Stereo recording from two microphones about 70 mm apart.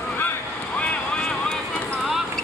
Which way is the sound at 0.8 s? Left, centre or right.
Centre.